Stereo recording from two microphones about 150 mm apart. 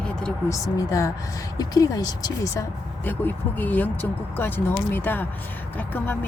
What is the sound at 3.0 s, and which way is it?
Speech, 10° left (ahead or behind).